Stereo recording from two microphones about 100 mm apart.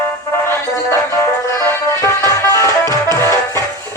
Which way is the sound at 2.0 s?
30° left (ahead or behind).